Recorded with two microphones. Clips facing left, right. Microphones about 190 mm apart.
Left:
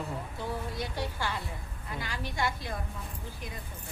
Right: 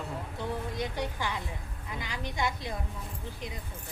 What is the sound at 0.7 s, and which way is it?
A woman's voice, 15° right (ahead or behind).